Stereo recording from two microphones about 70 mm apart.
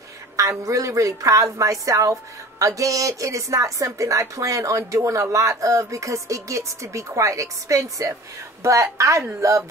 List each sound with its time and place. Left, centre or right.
0.4 s speech: right